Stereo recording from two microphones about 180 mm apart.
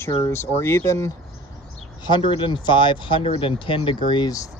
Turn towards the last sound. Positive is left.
turn(degrees=20)  # may be behind; listen again after turning